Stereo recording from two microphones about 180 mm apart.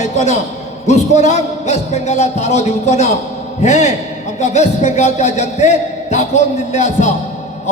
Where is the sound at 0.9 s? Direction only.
40° left (ahead or behind).